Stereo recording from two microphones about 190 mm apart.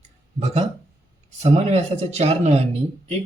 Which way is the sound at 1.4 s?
35° right (ahead or behind).